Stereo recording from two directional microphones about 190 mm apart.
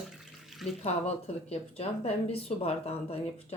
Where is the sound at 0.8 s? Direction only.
35° left (ahead or behind).